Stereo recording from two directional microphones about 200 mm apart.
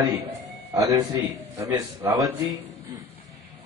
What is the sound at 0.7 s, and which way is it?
A man's voice, 20° right (ahead or behind).